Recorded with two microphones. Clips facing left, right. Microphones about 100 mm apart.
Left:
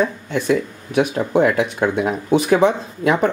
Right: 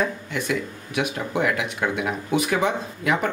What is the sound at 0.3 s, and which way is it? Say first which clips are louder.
Speech: left 7 dB; 35° left (ahead or behind).